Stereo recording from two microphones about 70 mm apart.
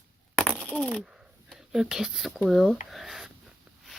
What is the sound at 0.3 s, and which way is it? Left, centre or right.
Coin, centre.